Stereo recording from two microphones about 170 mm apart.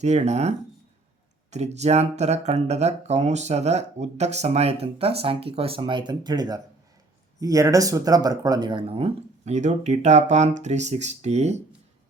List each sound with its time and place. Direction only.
0.0 s speech: 40° right (ahead or behind)